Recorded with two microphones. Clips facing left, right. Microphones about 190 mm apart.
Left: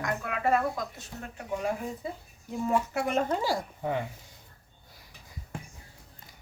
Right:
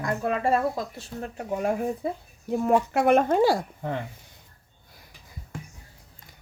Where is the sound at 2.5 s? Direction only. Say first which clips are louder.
Right 6 dB; 65° right (ahead or behind).